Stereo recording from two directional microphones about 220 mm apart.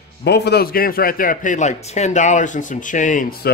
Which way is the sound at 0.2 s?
50° left (ahead or behind).